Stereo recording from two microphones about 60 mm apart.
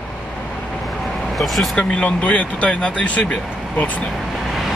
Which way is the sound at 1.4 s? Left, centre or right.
Centre.